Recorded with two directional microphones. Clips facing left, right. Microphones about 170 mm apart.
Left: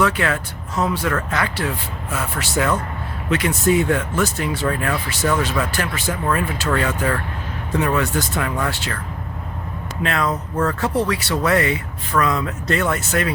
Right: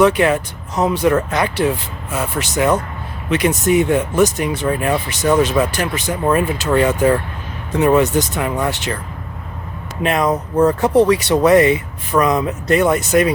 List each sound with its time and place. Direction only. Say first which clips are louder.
0.0 s speech: right 7 dB; 20° right (ahead or behind)
10.0 s speech: right 5 dB; 20° right (ahead or behind)